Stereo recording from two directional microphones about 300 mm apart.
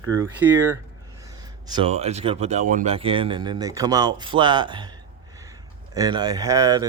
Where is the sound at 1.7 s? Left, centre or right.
Centre.